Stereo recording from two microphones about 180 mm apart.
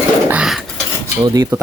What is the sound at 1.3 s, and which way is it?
Speech, 15° right (ahead or behind).